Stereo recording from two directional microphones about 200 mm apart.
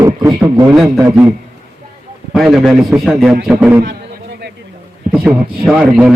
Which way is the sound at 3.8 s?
55° right (ahead or behind).